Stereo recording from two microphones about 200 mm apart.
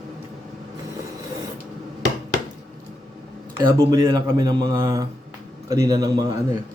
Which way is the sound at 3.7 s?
20° right (ahead or behind).